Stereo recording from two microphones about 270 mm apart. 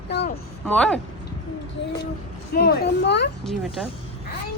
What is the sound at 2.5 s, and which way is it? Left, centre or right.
Speech, left.